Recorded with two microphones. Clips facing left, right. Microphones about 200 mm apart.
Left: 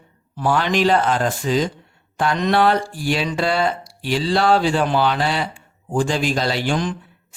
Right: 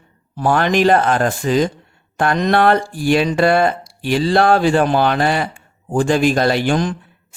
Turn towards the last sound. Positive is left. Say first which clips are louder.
# right 5 dB
turn(degrees=-50)  # may be behind; listen again after turning